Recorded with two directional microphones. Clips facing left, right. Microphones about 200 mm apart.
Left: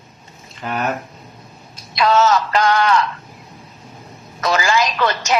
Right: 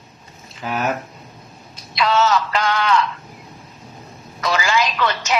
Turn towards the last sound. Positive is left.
turn(degrees=45)  # may be behind; listen again after turning